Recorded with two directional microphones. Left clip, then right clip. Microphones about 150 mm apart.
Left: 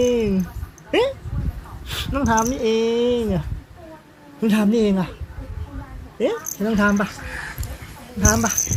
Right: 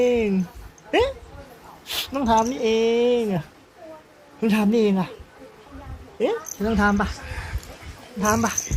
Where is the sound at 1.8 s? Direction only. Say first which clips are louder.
Left 1 dB; 25° right (ahead or behind).